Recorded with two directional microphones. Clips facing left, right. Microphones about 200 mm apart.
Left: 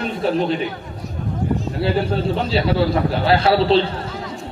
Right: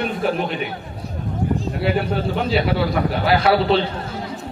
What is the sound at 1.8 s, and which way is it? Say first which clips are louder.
A man's voice: left 2 dB; 30° left (ahead or behind).